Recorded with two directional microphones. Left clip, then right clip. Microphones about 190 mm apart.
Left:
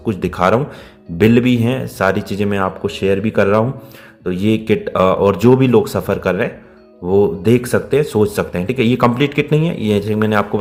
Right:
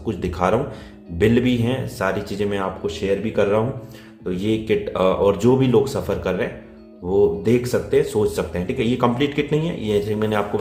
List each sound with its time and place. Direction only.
0.0 s speech: 40° left (ahead or behind)